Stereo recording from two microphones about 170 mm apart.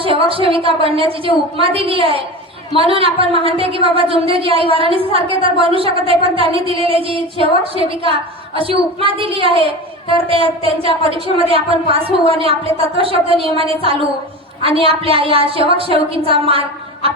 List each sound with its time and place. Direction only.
0.0 s a woman's voice: 30° right (ahead or behind)